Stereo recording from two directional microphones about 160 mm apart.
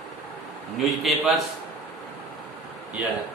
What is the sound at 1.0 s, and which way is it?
Speech, centre (ahead or behind).